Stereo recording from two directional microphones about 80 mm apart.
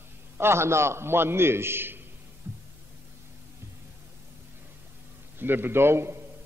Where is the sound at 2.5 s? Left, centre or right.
Right.